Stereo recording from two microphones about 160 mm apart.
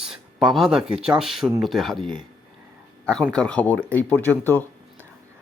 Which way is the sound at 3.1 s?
5° left (ahead or behind).